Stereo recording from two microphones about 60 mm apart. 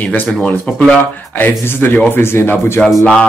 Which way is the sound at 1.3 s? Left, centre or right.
Left.